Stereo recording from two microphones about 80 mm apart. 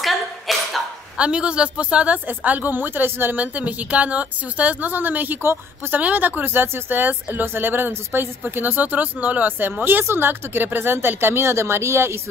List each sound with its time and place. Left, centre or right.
0.0 s cough: centre
1.1 s a woman's voice: centre; by 12.2 s right